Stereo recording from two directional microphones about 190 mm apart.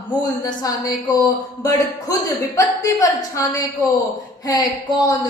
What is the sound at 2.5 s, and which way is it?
A woman's voice, 15° left (ahead or behind).